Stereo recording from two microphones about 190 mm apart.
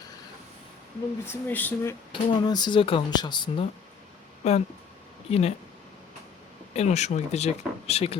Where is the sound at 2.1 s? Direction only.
25° left (ahead or behind).